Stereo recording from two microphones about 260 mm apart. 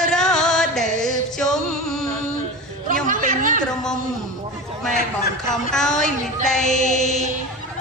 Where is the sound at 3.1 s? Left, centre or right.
Right.